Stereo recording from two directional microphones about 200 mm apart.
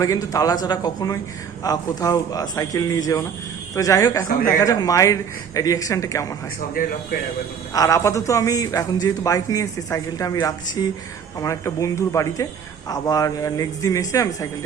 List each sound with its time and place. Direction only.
0.0 s a man's voice: 15° left (ahead or behind)
6.8 s speech: 45° left (ahead or behind)
7.7 s a man's voice: 15° left (ahead or behind)